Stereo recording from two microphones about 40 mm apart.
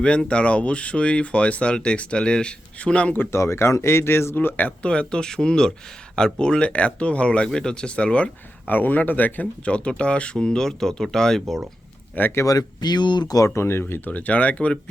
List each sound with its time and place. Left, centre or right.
0.0 s speech: left
3.2 s speech: left
4.4 s speech: left
4.8 s speech: left
8.6 s speech: left
9.6 s speech: left
10.3 s speech: centre
12.2 s speech: left
13.5 s speech: left
14.1 s speech: left